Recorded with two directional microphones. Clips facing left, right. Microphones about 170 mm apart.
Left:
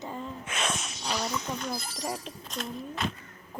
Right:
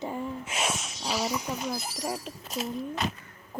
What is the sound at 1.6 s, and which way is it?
Speech, 5° right (ahead or behind).